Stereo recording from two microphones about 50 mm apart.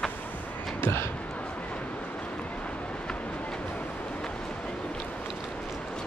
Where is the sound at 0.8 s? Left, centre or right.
Left.